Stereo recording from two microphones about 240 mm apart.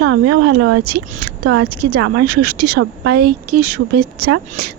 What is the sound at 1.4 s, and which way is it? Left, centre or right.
Speech, right.